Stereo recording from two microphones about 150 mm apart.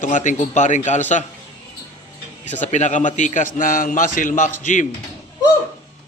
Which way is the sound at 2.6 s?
55° left (ahead or behind).